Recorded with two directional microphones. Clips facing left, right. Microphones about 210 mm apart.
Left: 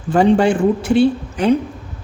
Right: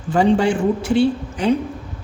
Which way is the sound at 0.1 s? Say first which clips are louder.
Left 3 dB; 55° left (ahead or behind).